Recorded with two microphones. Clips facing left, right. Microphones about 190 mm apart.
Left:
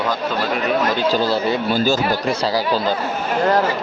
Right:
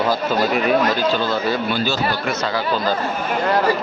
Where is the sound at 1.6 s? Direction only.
40° left (ahead or behind).